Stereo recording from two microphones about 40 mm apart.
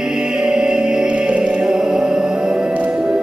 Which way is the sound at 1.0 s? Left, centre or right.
Right.